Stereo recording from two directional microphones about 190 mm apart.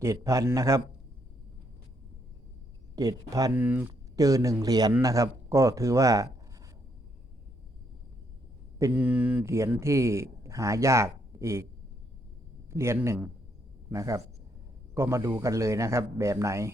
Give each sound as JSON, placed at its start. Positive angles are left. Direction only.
{"t": 0.0, "sound": "speech", "side_deg": -15}
{"t": 2.9, "sound": "speech", "side_deg": -20}
{"t": 8.8, "sound": "speech", "side_deg": -5}
{"t": 12.7, "sound": "speech", "side_deg": -15}